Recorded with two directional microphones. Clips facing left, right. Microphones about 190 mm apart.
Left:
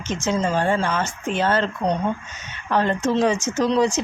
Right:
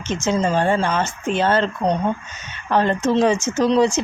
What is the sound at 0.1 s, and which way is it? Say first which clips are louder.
Speech: right 2 dB; 25° right (ahead or behind).